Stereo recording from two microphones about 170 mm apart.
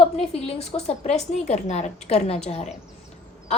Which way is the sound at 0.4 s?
40° left (ahead or behind).